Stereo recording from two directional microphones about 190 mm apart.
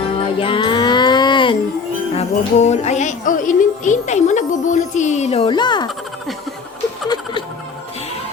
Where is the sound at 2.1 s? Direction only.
35° left (ahead or behind).